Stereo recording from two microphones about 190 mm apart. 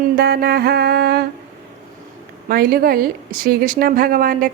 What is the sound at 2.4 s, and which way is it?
Speech, 50° right (ahead or behind).